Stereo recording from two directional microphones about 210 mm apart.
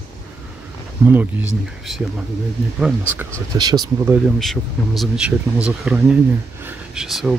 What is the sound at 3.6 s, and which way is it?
Speech, 20° right (ahead or behind).